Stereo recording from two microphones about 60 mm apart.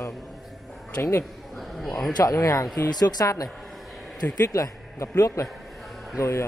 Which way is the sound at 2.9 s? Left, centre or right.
Left.